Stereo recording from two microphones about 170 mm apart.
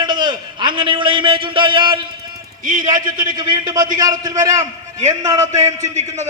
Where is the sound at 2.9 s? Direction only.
25° right (ahead or behind).